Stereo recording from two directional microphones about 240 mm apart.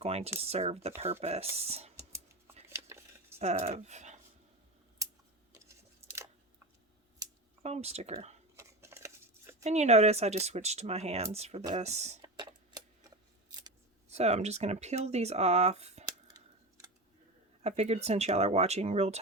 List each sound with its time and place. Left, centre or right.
0.0 s speech: right
2.6 s dishes: centre
3.3 s speech: right
5.5 s a sound: centre
7.6 s speech: right
8.5 s scissors: centre
9.6 s speech: right
12.2 s a sound: centre
14.1 s speech: right
16.2 s scissors: centre
17.6 s speech: right